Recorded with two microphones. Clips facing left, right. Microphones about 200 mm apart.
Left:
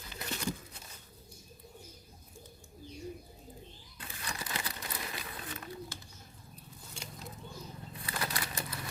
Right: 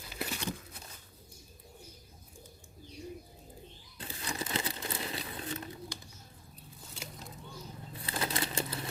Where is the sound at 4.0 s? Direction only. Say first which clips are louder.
Right 4 dB; 25° right (ahead or behind).